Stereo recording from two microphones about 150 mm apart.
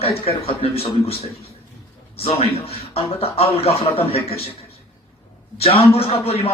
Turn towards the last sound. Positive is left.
turn(degrees=40)  # may be behind; listen again after turning